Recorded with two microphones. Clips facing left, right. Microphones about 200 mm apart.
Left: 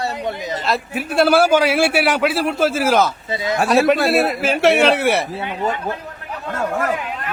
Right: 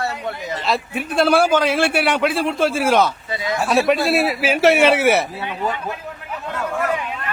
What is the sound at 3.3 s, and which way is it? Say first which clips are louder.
Speech: left 2 dB; 25° left (ahead or behind).